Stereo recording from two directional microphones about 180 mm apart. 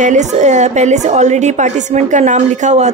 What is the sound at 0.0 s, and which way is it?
A woman's voice, 40° right (ahead or behind).